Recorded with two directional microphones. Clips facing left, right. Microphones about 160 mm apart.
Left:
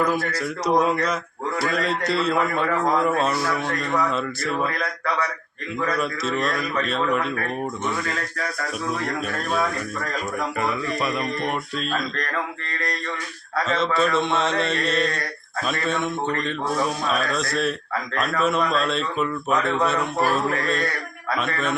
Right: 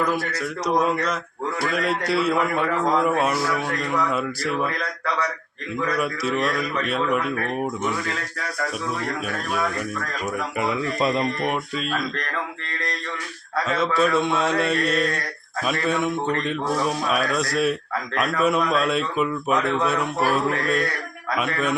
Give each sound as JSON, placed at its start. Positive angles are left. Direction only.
{"t": 0.1, "sound": "a man's voice", "side_deg": 5}
{"t": 6.0, "sound": "a man's voice", "side_deg": -10}
{"t": 10.6, "sound": "speech", "side_deg": -25}
{"t": 11.4, "sound": "speech", "side_deg": -5}
{"t": 13.7, "sound": "a man's voice", "side_deg": -10}